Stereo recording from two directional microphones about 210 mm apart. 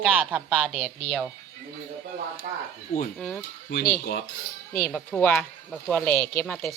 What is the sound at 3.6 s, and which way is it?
Speech, 50° left (ahead or behind).